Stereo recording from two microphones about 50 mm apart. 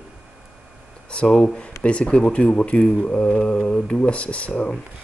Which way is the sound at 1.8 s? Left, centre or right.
Left.